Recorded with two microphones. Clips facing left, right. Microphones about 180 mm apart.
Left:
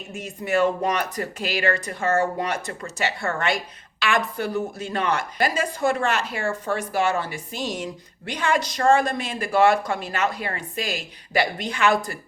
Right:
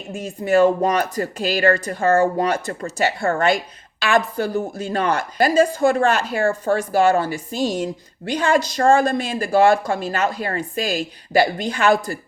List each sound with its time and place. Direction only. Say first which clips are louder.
0.1 s speech: right 6 dB; 35° right (ahead or behind)
5.8 s speech: right 5 dB; 45° right (ahead or behind)
6.7 s speech: right 6 dB; 50° right (ahead or behind)
7.1 s speech: right 7 dB; 40° right (ahead or behind)